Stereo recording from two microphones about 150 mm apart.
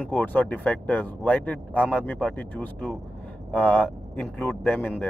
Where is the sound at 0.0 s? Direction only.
10° left (ahead or behind).